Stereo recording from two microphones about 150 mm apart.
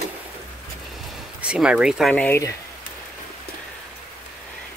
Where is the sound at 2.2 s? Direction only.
15° left (ahead or behind).